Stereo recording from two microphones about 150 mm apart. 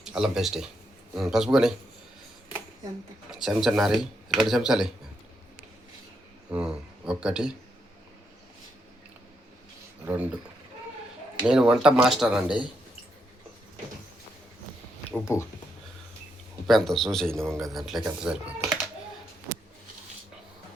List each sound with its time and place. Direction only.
0.0 s speech: 5° right (ahead or behind)
3.2 s speech: 5° right (ahead or behind)
6.5 s speech: 5° right (ahead or behind)
10.1 s speech: 10° right (ahead or behind)
11.4 s speech: 5° right (ahead or behind)
15.2 s speech: 20° left (ahead or behind)
16.6 s speech: centre (ahead or behind)